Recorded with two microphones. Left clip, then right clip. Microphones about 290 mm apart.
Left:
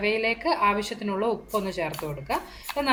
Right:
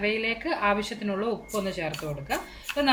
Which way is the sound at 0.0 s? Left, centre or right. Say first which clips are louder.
Left 3 dB; centre.